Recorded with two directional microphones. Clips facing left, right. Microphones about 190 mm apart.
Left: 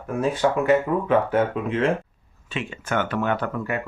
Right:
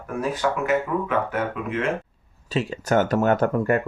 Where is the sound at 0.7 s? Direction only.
30° left (ahead or behind).